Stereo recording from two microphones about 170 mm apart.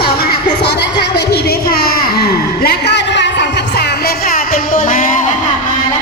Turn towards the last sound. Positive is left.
turn(degrees=50)  # may be behind; listen again after turning